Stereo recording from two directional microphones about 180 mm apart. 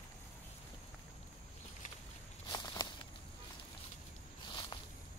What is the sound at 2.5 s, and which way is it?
Walk, 20° left (ahead or behind).